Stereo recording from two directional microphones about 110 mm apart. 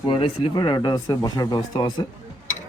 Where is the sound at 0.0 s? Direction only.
50° left (ahead or behind).